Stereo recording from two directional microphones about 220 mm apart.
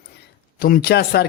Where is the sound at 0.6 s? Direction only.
40° left (ahead or behind).